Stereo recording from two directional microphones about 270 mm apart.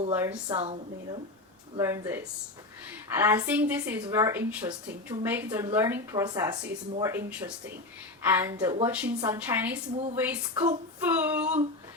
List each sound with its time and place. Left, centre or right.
0.1 s speech: centre
0.5 s a woman's voice: right
1.7 s speech: centre
11.0 s a sound: centre